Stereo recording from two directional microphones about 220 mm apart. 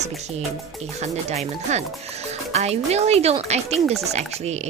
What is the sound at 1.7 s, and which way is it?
Music, 30° right (ahead or behind).